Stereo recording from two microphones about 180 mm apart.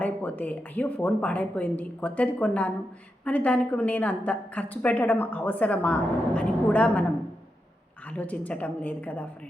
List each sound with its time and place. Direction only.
0.0 s a woman's voice: 10° left (ahead or behind)
8.0 s a woman's voice: 10° left (ahead or behind)